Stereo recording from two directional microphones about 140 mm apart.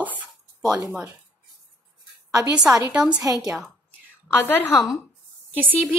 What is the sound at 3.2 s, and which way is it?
Speech, 25° right (ahead or behind).